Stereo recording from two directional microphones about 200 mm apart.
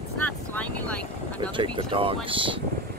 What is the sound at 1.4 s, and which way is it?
Speech, 25° right (ahead or behind).